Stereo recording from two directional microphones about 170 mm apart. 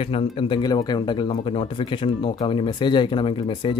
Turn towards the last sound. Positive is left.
turn(degrees=30)  # may be behind; listen again after turning